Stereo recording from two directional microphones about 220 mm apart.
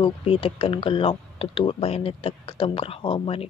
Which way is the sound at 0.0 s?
25° left (ahead or behind).